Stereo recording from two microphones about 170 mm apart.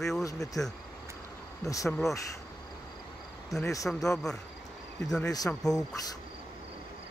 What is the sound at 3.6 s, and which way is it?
Speech, 20° left (ahead or behind).